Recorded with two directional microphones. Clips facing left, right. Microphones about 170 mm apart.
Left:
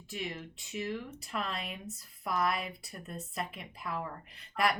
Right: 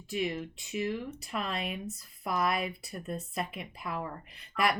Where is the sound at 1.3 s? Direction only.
15° right (ahead or behind).